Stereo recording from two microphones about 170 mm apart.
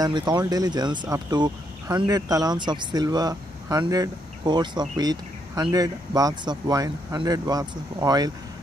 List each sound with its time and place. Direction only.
0.0 s speech: 25° right (ahead or behind)